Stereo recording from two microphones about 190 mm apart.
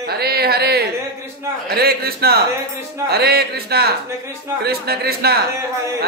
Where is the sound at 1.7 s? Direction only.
55° right (ahead or behind).